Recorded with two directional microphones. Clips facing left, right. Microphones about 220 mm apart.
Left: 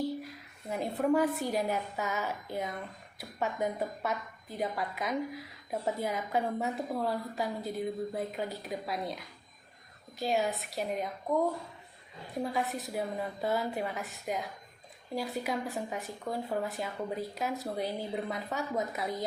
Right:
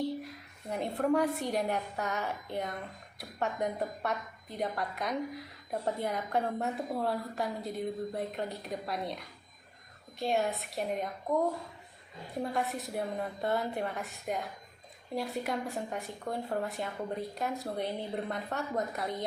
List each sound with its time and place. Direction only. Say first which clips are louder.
0.0 s a woman's voice: even; centre (ahead or behind)